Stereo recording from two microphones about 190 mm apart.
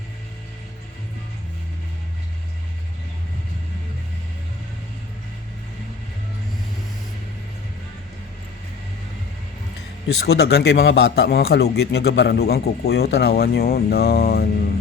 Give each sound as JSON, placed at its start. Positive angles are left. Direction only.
{"t": 10.1, "sound": "a man's voice", "side_deg": 60}